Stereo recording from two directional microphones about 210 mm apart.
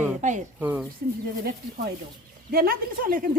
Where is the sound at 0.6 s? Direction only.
10° right (ahead or behind).